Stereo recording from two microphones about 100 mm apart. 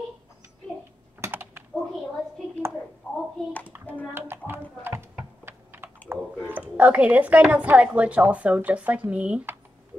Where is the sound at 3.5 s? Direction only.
15° left (ahead or behind).